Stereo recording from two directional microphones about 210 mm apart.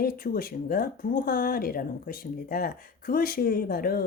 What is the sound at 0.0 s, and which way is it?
Speech, 45° left (ahead or behind).